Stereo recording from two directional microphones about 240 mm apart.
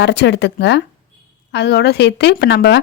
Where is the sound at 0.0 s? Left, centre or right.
Left.